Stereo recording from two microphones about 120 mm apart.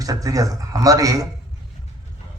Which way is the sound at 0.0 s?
30° right (ahead or behind).